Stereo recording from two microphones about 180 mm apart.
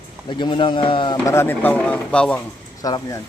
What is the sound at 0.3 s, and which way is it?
Speech, 25° left (ahead or behind).